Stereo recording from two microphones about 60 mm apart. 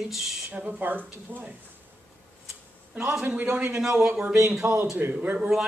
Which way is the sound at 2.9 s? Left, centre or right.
Right.